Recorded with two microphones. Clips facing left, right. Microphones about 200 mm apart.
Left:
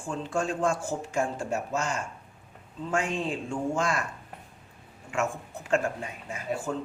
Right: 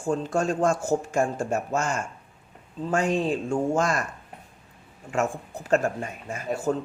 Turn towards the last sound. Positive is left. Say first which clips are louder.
# right 5 dB
turn(degrees=-40)  # may be behind; listen again after turning